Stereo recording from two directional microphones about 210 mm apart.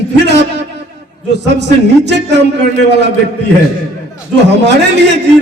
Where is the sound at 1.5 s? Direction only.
55° right (ahead or behind).